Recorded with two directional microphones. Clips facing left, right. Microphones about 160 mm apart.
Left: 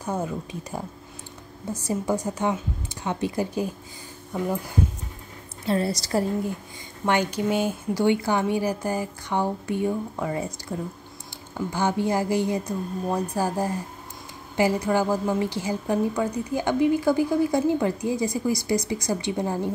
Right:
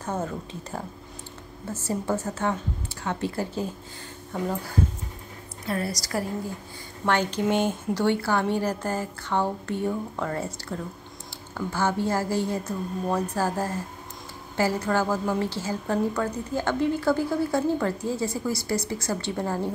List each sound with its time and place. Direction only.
0.0 s a woman's voice: 10° left (ahead or behind)
5.7 s a woman's voice: 25° left (ahead or behind)
7.1 s a woman's voice: 10° left (ahead or behind)